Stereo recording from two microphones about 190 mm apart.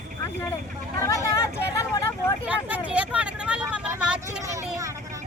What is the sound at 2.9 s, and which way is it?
Vehicle, 5° right (ahead or behind).